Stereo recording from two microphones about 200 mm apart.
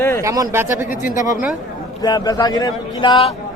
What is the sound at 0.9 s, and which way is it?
Speech, 40° left (ahead or behind).